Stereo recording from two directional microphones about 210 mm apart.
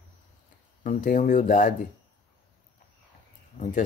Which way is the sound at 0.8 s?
40° left (ahead or behind).